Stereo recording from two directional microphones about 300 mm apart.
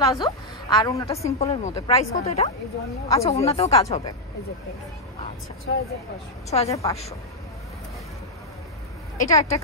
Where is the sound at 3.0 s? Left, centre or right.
Centre.